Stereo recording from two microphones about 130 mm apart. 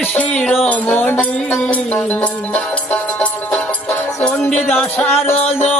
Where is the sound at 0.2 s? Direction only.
5° left (ahead or behind).